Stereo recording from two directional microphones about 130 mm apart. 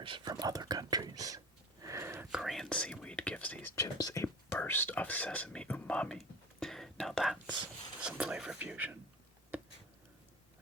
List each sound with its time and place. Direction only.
0.0 s speech: 35° right (ahead or behind)
1.8 s whispering: 20° right (ahead or behind)
2.3 s speech: centre (ahead or behind)
3.8 s speech: 30° left (ahead or behind); by 9.0 s 10° right (ahead or behind)